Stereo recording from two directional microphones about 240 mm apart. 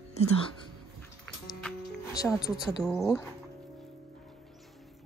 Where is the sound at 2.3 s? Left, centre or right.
Centre.